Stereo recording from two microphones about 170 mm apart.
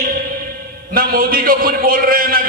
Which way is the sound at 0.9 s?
60° right (ahead or behind).